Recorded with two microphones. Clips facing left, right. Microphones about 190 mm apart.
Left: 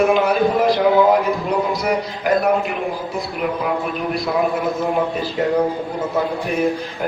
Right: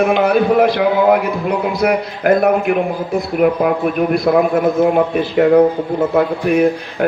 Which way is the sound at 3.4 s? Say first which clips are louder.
Right 8 dB; 50° right (ahead or behind).